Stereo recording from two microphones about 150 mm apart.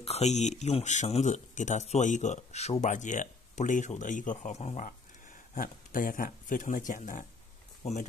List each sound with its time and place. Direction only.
0.0 s speech: 45° left (ahead or behind)